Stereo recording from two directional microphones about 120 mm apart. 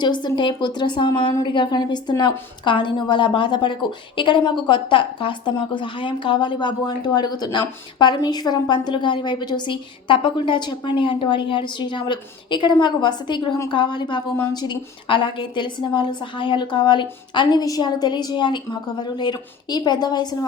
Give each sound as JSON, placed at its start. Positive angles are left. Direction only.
{"t": 0.0, "sound": "a woman's voice", "side_deg": 40}